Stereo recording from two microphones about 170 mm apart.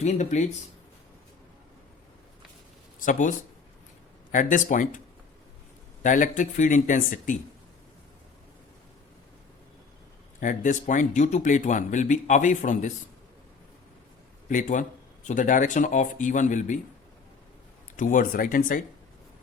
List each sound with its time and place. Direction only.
0.0 s speech: 40° left (ahead or behind)
3.0 s speech: 50° left (ahead or behind)
6.0 s speech: 50° left (ahead or behind)
10.4 s speech: 50° left (ahead or behind)
14.5 s speech: 45° left (ahead or behind)
17.9 s speech: 50° left (ahead or behind)